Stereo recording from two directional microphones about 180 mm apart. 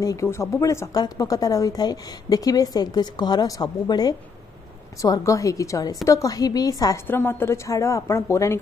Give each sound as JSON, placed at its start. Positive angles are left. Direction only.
{"t": 0.0, "sound": "a woman's voice", "side_deg": 15}